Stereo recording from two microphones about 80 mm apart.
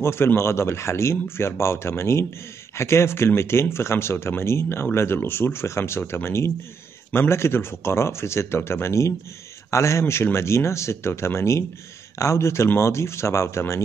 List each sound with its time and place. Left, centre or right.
0.0 s speech: left